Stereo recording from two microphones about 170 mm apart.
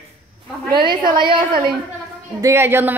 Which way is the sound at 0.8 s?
25° right (ahead or behind).